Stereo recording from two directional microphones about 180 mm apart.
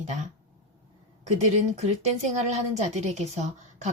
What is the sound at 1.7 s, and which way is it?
A woman's voice, 40° right (ahead or behind).